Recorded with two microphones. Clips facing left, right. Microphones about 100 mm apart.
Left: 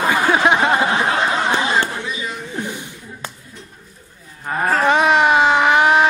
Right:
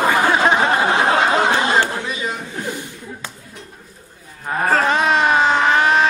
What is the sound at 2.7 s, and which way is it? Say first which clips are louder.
Chuckle: right 2 dB; 15° left (ahead or behind).